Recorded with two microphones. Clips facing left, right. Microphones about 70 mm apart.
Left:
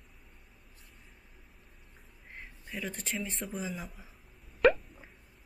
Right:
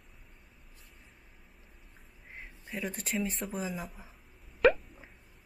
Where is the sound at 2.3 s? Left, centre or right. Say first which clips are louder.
Right 1 dB; centre.